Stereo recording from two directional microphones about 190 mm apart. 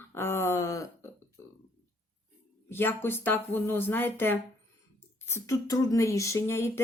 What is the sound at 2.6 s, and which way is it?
Speech, 10° left (ahead or behind).